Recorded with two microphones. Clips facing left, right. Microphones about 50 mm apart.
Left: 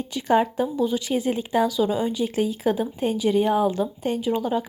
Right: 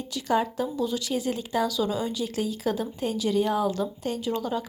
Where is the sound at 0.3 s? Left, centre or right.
Left.